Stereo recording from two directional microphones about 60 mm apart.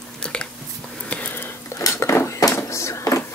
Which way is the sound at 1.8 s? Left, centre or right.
Left.